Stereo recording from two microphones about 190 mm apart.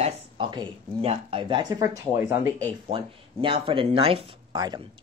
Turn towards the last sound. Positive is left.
turn(degrees=-20)  # may be behind; listen again after turning